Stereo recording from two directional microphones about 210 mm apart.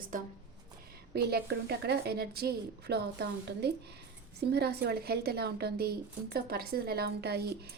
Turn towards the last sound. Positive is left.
turn(degrees=-50)  # may be behind; listen again after turning